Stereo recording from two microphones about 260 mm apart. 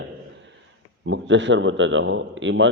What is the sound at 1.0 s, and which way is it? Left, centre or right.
A man's voice, right.